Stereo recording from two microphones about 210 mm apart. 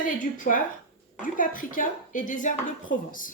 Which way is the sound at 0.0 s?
40° left (ahead or behind).